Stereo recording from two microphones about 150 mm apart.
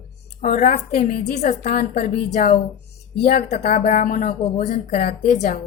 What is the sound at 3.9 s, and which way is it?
Speech, 60° left (ahead or behind).